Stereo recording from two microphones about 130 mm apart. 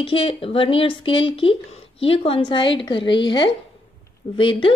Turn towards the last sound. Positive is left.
turn(degrees=40)  # may be behind; listen again after turning